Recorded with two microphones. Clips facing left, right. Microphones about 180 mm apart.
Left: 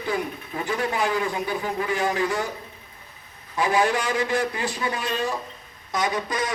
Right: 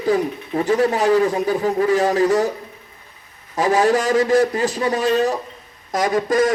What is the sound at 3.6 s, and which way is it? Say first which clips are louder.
A man's voice: right 6 dB; 40° right (ahead or behind).